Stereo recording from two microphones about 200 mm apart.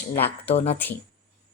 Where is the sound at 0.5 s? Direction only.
30° left (ahead or behind).